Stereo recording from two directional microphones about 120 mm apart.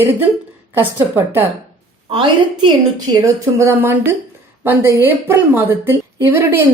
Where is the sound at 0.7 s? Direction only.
15° right (ahead or behind).